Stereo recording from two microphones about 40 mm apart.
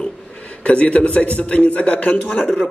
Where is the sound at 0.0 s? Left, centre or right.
Centre.